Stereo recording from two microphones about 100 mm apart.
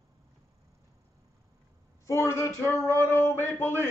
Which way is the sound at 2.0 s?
30° left (ahead or behind).